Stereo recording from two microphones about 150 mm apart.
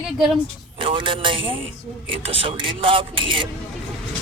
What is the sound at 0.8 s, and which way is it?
Speech, 35° right (ahead or behind).